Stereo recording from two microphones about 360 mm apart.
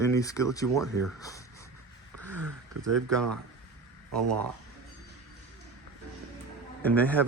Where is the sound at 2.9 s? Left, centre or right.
Right.